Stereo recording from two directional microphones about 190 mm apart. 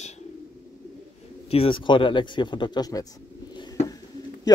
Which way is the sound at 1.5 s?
30° left (ahead or behind).